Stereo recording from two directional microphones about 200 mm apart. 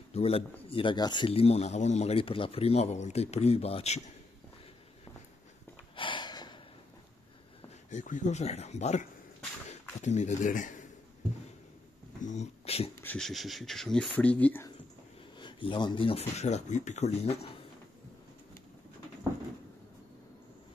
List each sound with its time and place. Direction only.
0.1 s speech: 30° left (ahead or behind)
5.9 s a sound: 25° left (ahead or behind)
7.9 s speech: 40° left (ahead or behind)
12.2 s a sound: 35° left (ahead or behind)
13.0 s speech: 5° left (ahead or behind)
15.3 s speech: 25° left (ahead or behind)